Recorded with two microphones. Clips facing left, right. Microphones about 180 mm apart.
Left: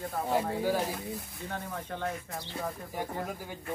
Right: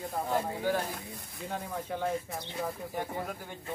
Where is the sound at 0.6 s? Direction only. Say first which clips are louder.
Left 2 dB; 5° left (ahead or behind).